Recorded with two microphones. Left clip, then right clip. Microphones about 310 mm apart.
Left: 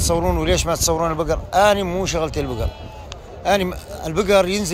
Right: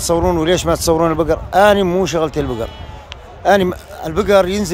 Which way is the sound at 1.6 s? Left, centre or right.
Right.